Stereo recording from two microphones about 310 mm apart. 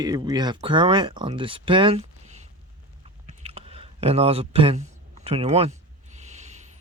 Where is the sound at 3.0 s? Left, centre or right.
Centre.